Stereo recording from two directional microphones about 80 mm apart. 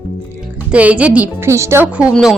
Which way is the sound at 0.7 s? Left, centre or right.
Centre.